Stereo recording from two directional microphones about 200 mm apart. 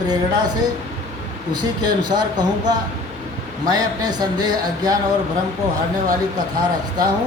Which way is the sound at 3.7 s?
20° right (ahead or behind).